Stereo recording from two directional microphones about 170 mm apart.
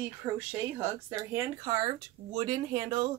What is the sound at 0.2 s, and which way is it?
Speech, 15° right (ahead or behind).